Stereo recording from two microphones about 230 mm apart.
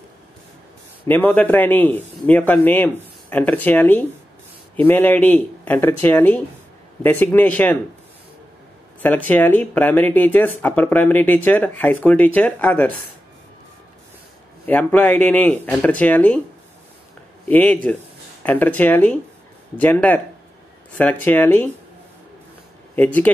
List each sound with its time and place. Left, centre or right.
1.0 s speech: centre
9.0 s speech: centre
14.7 s speech: centre
17.5 s speech: centre
22.9 s speech: centre